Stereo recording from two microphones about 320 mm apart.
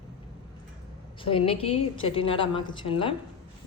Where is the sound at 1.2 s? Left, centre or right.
Centre.